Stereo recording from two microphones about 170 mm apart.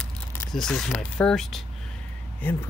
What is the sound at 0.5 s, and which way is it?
Speech, 5° left (ahead or behind).